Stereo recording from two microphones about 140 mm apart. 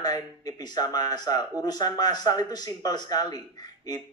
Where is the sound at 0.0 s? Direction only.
25° left (ahead or behind).